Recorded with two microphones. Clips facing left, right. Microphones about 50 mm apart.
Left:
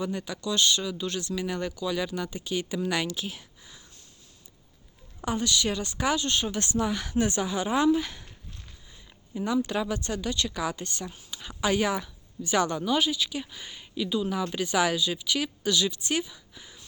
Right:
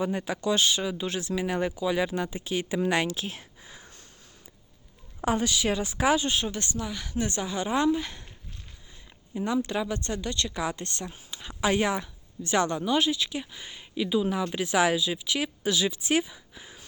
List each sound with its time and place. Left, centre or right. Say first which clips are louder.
0.0 s speech: right 3 dB; right
2.1 s speech: right 1 dB; centre
3.3 s a sound: right 2 dB; right
5.3 s speech: right 2 dB; right
5.6 s speech: right 3 dB; centre
6.8 s speech: left 5 dB; left
7.4 s a woman's voice: right 1 dB; centre
9.3 s a woman's voice: even; centre
13.9 s speech: right 2 dB; centre